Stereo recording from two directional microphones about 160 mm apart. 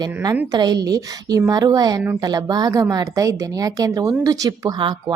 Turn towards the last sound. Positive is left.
turn(degrees=-25)  # may be behind; listen again after turning